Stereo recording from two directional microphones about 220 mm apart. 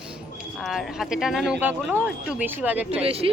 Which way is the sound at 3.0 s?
25° right (ahead or behind).